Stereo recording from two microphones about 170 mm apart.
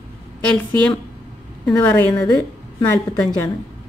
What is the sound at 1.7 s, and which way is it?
Speech, 10° left (ahead or behind).